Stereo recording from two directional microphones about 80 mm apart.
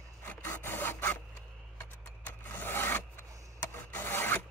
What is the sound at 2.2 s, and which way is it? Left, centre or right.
Rub, left.